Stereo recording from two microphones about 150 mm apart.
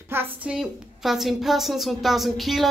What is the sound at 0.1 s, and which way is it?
A woman's voice, 10° right (ahead or behind).